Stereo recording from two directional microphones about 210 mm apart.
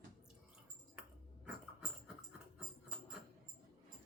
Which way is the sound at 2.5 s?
5° right (ahead or behind).